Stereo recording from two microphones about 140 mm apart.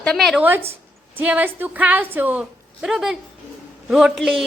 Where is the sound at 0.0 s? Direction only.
5° left (ahead or behind).